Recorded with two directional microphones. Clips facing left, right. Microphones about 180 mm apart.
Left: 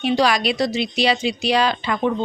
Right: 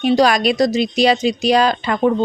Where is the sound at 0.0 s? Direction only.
45° right (ahead or behind).